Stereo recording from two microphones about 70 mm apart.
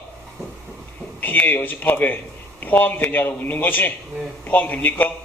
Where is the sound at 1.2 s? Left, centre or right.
Left.